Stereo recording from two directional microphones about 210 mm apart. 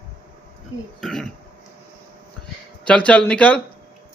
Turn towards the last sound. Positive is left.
turn(degrees=5)  # may be behind; listen again after turning